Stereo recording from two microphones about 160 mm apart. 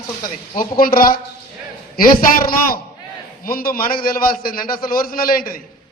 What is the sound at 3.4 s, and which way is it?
A man's voice, 65° left (ahead or behind).